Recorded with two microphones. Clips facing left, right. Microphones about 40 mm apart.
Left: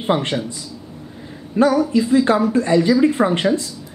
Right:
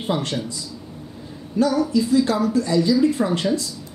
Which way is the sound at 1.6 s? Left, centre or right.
Left.